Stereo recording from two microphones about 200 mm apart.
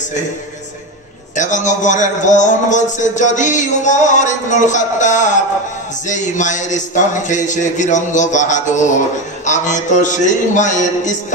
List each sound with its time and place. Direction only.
1.3 s a man's voice: 40° left (ahead or behind)